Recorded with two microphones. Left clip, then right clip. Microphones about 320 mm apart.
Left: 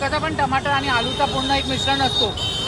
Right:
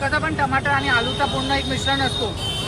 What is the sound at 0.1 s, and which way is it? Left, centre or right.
Speech, centre.